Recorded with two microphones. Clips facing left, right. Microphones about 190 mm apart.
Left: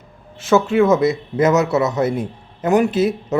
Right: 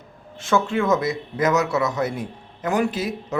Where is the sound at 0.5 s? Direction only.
20° left (ahead or behind).